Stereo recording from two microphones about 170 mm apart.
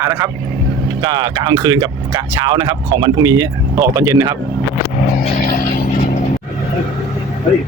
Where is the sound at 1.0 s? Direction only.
30° right (ahead or behind).